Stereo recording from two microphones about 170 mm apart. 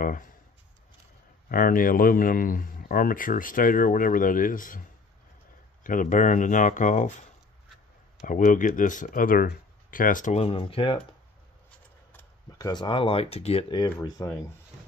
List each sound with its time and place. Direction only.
1.5 s speech: 55° left (ahead or behind)
5.9 s speech: 50° left (ahead or behind)
8.3 s speech: 50° left (ahead or behind); by 11.0 s 30° left (ahead or behind)
12.5 s speech: 25° left (ahead or behind)